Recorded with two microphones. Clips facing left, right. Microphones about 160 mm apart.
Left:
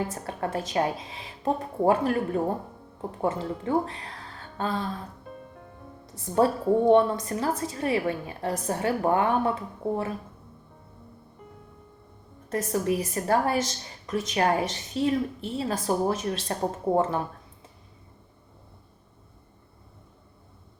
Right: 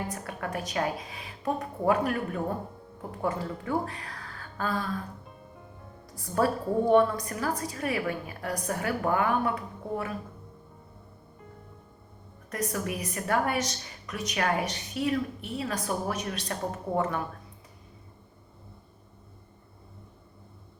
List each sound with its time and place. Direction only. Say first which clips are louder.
0.1 s a woman's voice: left 4 dB; 30° left (ahead or behind)
6.1 s a woman's voice: left 4 dB; 25° left (ahead or behind)
12.5 s a woman's voice: left 6 dB; 30° left (ahead or behind)